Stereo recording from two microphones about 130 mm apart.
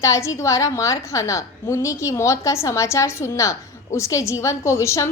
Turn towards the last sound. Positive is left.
turn(degrees=20)  # may be behind; listen again after turning